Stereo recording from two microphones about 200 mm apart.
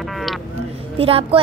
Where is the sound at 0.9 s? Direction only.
30° right (ahead or behind).